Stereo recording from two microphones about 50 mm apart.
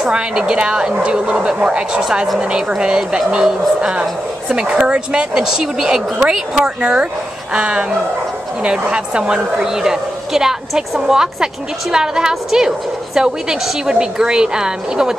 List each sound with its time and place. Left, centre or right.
0.0 s a woman's voice: centre